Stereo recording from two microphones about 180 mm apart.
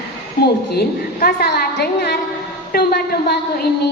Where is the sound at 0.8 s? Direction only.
60° left (ahead or behind).